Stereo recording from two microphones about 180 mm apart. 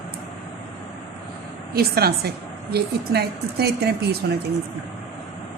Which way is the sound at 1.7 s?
60° right (ahead or behind).